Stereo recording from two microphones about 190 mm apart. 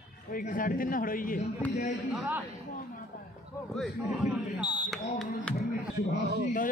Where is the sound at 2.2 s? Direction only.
10° right (ahead or behind).